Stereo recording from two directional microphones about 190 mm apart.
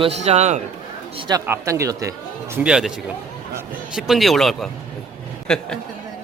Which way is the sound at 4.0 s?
Centre (ahead or behind).